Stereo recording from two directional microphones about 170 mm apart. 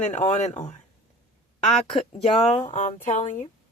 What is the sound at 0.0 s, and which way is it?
Speech, 45° left (ahead or behind).